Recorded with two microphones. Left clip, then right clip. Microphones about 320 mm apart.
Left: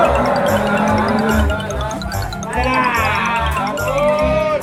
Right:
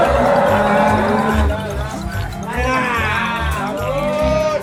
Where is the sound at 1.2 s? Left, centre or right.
Centre.